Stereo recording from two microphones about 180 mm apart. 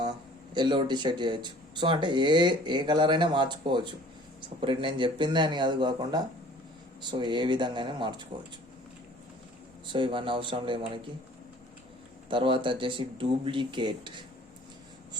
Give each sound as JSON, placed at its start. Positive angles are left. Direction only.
{"t": 0.5, "sound": "speech", "side_deg": -25}
{"t": 9.8, "sound": "speech", "side_deg": -25}
{"t": 12.3, "sound": "speech", "side_deg": -30}